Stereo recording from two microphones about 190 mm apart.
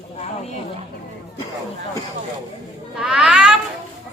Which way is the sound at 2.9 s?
5° right (ahead or behind).